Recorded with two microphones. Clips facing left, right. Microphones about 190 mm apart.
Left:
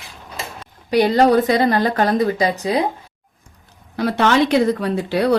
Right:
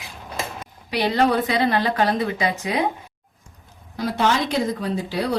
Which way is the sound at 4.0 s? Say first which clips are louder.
Left 5 dB; 65° left (ahead or behind).